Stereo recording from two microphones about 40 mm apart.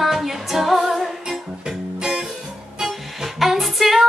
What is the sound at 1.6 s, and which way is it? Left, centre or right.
Music, centre.